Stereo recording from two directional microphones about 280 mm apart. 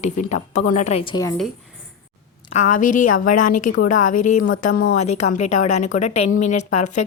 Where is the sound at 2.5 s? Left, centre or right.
Left.